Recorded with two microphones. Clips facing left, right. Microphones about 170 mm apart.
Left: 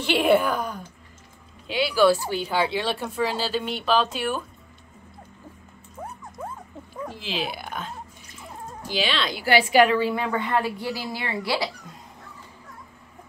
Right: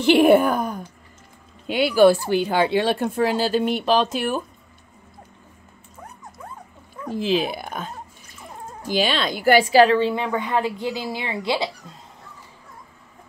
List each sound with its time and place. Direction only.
0.2 s speech: 45° right (ahead or behind)
7.2 s a woman's voice: 45° right (ahead or behind); by 11.7 s 20° right (ahead or behind)